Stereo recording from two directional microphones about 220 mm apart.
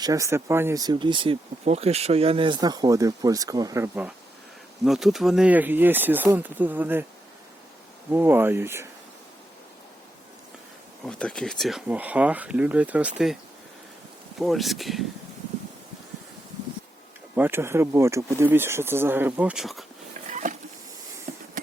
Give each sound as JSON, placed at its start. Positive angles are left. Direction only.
{"t": 0.0, "sound": "speech", "side_deg": -15}
{"t": 8.1, "sound": "speech", "side_deg": -10}
{"t": 11.0, "sound": "speech", "side_deg": 5}
{"t": 17.3, "sound": "speech", "side_deg": -10}
{"t": 20.3, "sound": "a sound", "side_deg": -35}
{"t": 21.3, "sound": "insect", "side_deg": -40}